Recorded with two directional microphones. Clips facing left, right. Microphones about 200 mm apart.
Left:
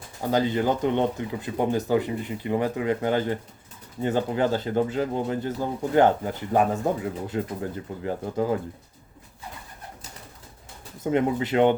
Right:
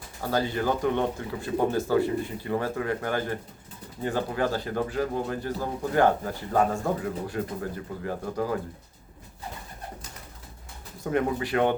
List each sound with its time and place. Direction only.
0.2 s speech: 20° left (ahead or behind)
11.0 s speech: 20° left (ahead or behind)